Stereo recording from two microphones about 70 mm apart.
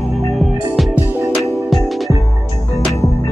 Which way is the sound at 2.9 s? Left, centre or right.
Left.